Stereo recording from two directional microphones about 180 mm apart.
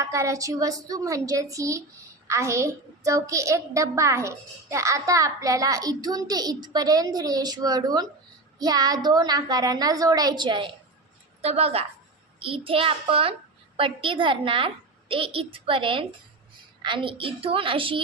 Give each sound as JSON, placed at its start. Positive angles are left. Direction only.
{"t": 0.0, "sound": "a woman's voice", "side_deg": -15}